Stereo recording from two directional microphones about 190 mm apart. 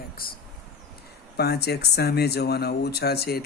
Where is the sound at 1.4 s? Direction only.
60° left (ahead or behind).